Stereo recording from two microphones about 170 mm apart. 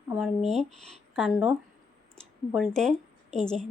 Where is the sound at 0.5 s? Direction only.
40° right (ahead or behind).